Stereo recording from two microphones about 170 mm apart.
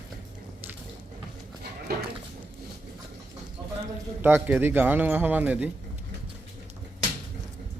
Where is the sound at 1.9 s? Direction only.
65° right (ahead or behind).